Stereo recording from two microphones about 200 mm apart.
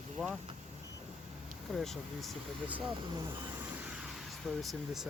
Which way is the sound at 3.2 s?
20° right (ahead or behind).